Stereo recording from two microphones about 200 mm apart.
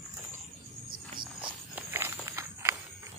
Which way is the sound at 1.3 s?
10° right (ahead or behind).